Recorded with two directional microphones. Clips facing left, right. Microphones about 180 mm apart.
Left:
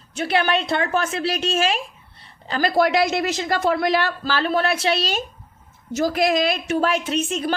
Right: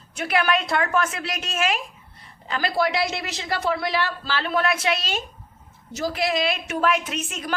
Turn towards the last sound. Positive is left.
turn(degrees=30)  # may be behind; listen again after turning